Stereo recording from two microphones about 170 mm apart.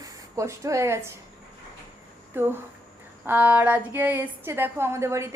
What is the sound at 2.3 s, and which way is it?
A woman's voice, 10° right (ahead or behind).